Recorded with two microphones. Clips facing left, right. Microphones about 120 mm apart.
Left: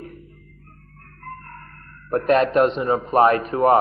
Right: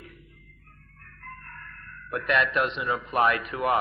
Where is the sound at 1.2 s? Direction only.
40° left (ahead or behind).